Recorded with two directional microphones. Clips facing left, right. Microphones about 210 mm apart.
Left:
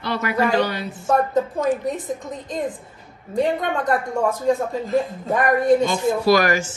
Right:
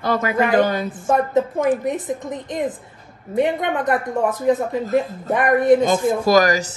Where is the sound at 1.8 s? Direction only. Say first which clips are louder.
Right 2 dB; 20° right (ahead or behind).